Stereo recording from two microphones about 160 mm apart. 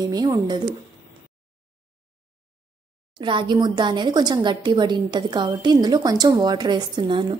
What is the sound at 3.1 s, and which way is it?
A woman's voice, 30° right (ahead or behind).